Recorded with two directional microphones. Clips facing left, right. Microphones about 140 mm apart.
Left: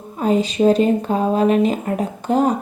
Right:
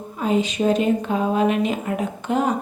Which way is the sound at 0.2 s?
40° left (ahead or behind).